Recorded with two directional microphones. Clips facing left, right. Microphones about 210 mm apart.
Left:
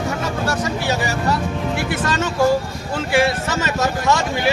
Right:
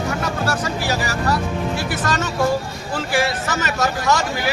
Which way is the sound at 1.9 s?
30° left (ahead or behind).